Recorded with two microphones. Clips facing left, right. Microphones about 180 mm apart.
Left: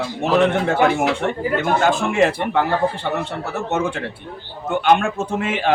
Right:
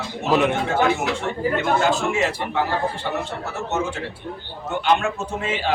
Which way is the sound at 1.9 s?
55° left (ahead or behind).